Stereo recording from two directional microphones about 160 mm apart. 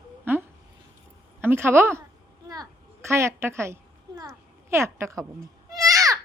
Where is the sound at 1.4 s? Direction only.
15° right (ahead or behind).